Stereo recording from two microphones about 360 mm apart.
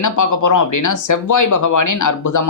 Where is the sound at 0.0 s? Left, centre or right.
Left.